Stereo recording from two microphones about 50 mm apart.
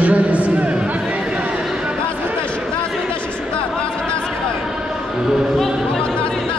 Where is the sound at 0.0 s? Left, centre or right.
Right.